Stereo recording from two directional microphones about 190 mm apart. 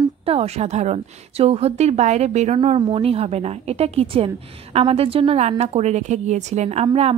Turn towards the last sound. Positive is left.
turn(degrees=-35)  # may be behind; listen again after turning